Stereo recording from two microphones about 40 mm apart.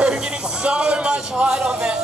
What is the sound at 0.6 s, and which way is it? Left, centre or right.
Speech, right.